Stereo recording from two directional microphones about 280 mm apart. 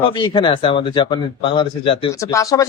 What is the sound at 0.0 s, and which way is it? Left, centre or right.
Speech, centre.